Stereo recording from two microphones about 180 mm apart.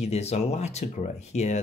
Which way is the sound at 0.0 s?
35° left (ahead or behind).